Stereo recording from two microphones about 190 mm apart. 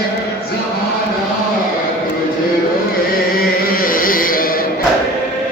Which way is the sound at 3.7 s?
45° left (ahead or behind).